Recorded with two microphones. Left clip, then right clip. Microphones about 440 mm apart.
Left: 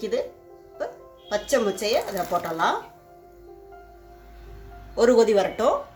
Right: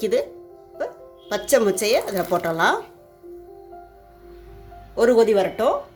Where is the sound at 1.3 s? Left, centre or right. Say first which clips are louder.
Right 4 dB; centre.